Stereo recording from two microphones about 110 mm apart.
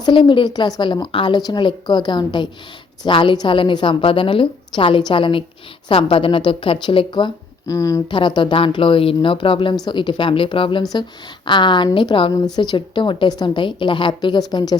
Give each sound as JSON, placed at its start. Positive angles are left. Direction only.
{"t": 0.0, "sound": "a woman's voice", "side_deg": 45}
{"t": 7.7, "sound": "speech", "side_deg": 30}
{"t": 8.1, "sound": "a woman's voice", "side_deg": 45}